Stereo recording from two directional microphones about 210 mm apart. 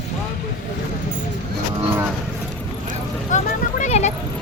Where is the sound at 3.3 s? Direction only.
35° left (ahead or behind).